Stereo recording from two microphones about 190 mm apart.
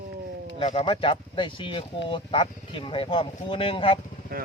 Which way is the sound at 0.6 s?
30° left (ahead or behind).